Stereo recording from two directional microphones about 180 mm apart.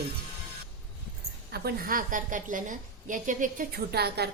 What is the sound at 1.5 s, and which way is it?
A woman's voice, 60° right (ahead or behind).